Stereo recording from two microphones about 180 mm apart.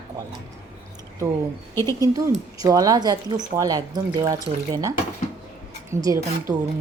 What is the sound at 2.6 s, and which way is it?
A woman's voice, 20° right (ahead or behind).